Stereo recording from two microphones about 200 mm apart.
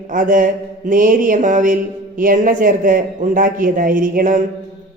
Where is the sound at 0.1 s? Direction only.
40° right (ahead or behind).